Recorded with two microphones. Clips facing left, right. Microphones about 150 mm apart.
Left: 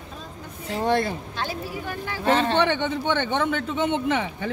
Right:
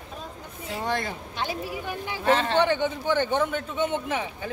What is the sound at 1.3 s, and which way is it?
Speech, 15° right (ahead or behind).